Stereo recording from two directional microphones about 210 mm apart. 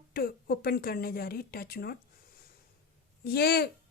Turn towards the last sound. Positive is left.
turn(degrees=50)  # may be behind; listen again after turning